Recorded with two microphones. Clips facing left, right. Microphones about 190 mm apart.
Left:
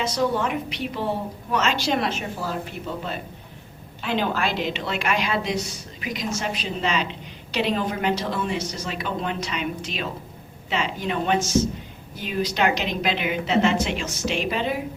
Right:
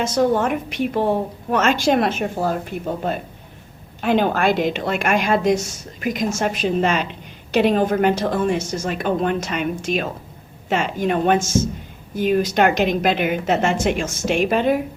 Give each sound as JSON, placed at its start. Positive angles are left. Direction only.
{"t": 0.0, "sound": "a woman's voice", "side_deg": -45}